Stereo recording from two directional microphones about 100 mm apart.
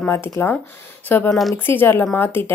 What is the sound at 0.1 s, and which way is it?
Speech, 20° left (ahead or behind).